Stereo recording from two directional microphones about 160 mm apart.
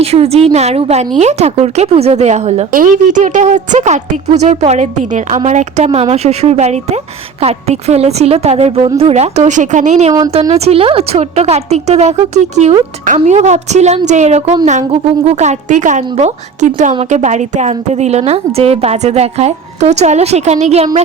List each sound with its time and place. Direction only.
0.0 s a woman's voice: 40° right (ahead or behind)
2.7 s a woman's voice: 55° right (ahead or behind)
10.1 s speech: 25° right (ahead or behind)
10.5 s a woman's voice: 40° right (ahead or behind)
13.1 s a woman's voice: 45° right (ahead or behind)